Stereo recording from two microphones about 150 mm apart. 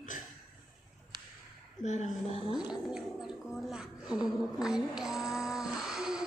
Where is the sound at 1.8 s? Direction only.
50° left (ahead or behind).